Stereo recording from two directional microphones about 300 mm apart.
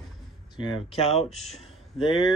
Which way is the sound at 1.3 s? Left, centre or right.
Centre.